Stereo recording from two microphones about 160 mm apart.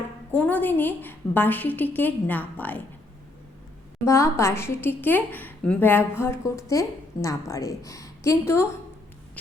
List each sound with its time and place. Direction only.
0.3 s a woman's voice: 10° left (ahead or behind)
4.0 s a woman's voice: 15° left (ahead or behind)